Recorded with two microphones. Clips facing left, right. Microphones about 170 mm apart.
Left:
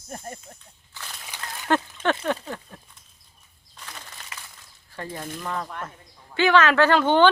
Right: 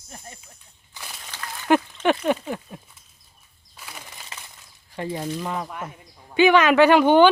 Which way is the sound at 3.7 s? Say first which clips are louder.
Right 1 dB; 10° right (ahead or behind).